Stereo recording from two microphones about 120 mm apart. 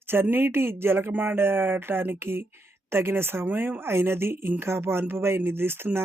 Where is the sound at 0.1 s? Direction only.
15° right (ahead or behind).